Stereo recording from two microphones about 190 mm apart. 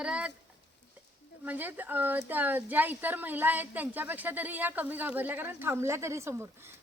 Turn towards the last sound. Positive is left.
turn(degrees=-15)  # may be behind; listen again after turning